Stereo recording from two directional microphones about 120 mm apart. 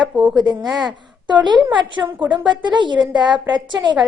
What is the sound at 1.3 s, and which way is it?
Speech, 40° right (ahead or behind).